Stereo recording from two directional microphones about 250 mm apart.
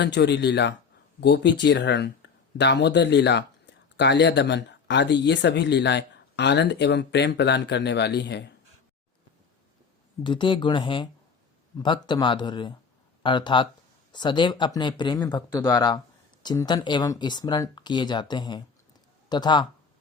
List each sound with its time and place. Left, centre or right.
0.0 s speech: left
10.2 s speech: centre